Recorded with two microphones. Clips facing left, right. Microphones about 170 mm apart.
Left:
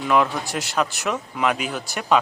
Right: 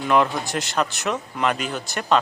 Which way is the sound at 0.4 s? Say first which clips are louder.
Even; 10° left (ahead or behind).